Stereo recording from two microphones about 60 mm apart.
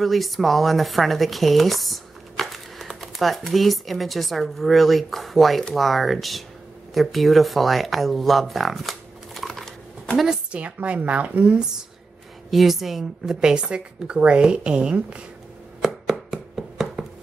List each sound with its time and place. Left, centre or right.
0.0 s speech: centre
10.1 s a sound: centre
10.6 s a woman's voice: right
12.4 s a woman's voice: centre
15.8 s chopping: centre